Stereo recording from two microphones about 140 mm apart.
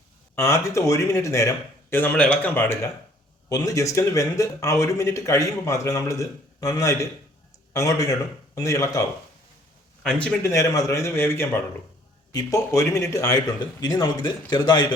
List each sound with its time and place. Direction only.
0.3 s a man's voice: 20° left (ahead or behind)
10.0 s a man's voice: 5° left (ahead or behind)
10.4 s a man's voice: 20° left (ahead or behind)